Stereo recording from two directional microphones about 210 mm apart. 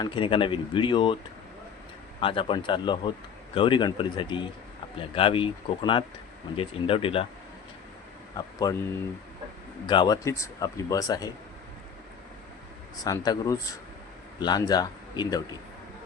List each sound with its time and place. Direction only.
0.0 s speech: 25° left (ahead or behind)
2.2 s speech: 25° left (ahead or behind)
8.4 s speech: 15° left (ahead or behind)
13.0 s speech: 20° left (ahead or behind)